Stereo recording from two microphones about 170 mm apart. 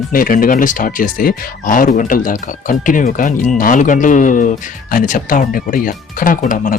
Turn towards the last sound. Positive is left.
turn(degrees=50)  # may be behind; listen again after turning